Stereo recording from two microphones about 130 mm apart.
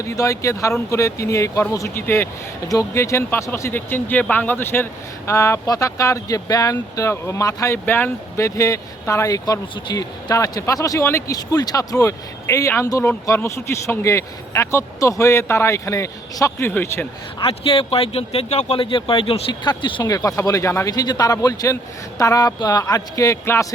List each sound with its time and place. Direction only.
0.0 s speech: 25° left (ahead or behind)
17.4 s speech: 45° left (ahead or behind)
20.0 s speech: 25° left (ahead or behind)